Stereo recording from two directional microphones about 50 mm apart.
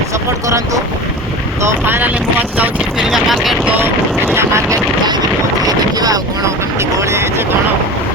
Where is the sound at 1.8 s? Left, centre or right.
Right.